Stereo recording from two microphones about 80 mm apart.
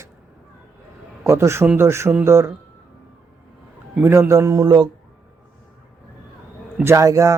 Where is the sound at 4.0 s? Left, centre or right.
Right.